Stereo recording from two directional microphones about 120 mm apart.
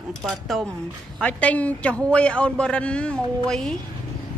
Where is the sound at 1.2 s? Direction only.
10° left (ahead or behind).